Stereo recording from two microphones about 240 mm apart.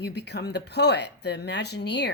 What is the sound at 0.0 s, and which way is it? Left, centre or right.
Speech, left.